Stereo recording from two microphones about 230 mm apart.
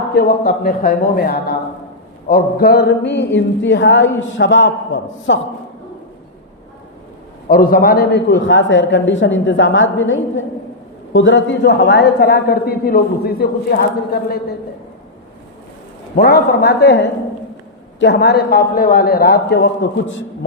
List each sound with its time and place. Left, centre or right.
0.1 s a man's voice: left
7.4 s a man's voice: left
16.1 s a man's voice: left